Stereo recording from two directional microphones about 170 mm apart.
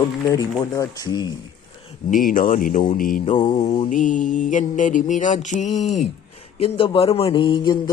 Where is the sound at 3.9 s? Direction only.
50° left (ahead or behind).